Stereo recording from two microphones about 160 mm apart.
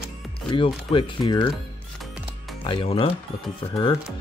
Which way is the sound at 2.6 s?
35° left (ahead or behind).